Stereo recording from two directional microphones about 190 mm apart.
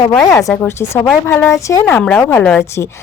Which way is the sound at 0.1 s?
15° left (ahead or behind).